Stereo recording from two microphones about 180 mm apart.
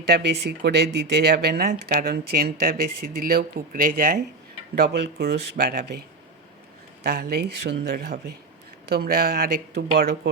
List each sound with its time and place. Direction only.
0.1 s speech: 65° right (ahead or behind)
4.8 s speech: 70° right (ahead or behind)
7.0 s speech: 60° right (ahead or behind)